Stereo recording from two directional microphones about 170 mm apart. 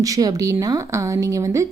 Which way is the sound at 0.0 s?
20° right (ahead or behind).